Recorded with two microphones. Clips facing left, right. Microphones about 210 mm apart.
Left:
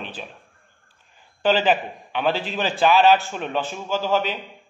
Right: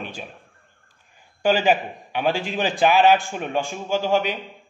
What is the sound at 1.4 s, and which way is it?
A man's voice, 10° right (ahead or behind).